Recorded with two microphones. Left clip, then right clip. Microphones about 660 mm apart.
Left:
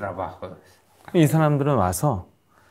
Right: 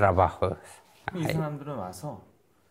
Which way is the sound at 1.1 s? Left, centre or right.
Left.